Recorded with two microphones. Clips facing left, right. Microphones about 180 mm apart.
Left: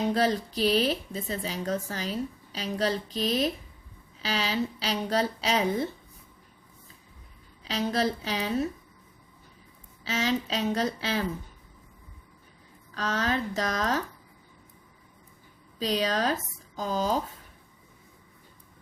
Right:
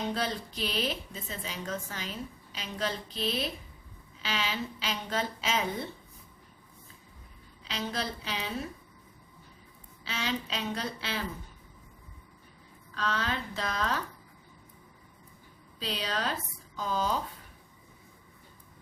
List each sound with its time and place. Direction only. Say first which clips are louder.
0.1 s a woman's voice: left 7 dB; 40° left (ahead or behind)
7.6 s a woman's voice: left 8 dB; 40° left (ahead or behind)
10.0 s a woman's voice: left 6 dB; 40° left (ahead or behind)
12.9 s a woman's voice: left 4 dB; 45° left (ahead or behind)
15.8 s a woman's voice: left 7 dB; 45° left (ahead or behind)